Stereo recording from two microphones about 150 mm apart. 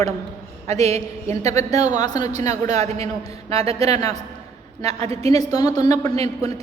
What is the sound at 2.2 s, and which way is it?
A man's voice, 50° right (ahead or behind).